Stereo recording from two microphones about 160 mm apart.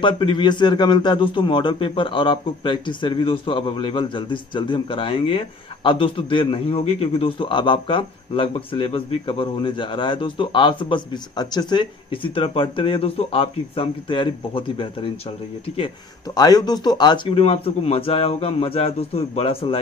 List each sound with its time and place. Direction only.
0.0 s a man's voice: 30° left (ahead or behind)
16.3 s a man's voice: 25° left (ahead or behind)